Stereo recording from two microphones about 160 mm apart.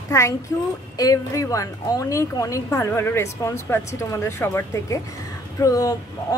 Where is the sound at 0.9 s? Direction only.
20° left (ahead or behind).